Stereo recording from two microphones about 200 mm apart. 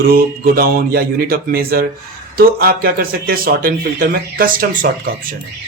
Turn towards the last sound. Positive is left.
turn(degrees=-45)  # may be behind; listen again after turning